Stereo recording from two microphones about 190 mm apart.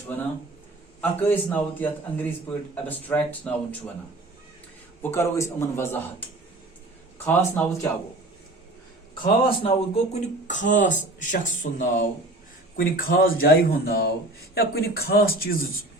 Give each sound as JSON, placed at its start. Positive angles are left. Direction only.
{"t": 1.2, "sound": "a man's voice", "side_deg": 10}
{"t": 5.0, "sound": "a man's voice", "side_deg": 15}
{"t": 7.3, "sound": "a man's voice", "side_deg": 10}
{"t": 9.2, "sound": "speech", "side_deg": 30}